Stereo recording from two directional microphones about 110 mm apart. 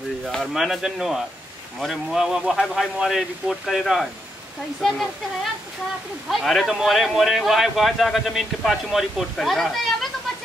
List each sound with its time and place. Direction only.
0.2 s a man's voice: 5° left (ahead or behind)
6.2 s a man's voice: centre (ahead or behind)